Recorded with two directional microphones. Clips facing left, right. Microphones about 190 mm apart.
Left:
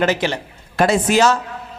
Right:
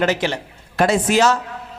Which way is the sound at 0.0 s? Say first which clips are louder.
Left 1 dB; 15° left (ahead or behind).